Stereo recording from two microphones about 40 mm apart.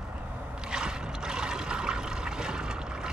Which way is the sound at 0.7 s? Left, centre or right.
Centre.